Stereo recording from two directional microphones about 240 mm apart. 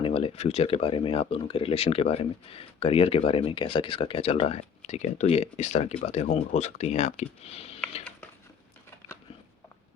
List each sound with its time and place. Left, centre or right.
0.0 s speech: left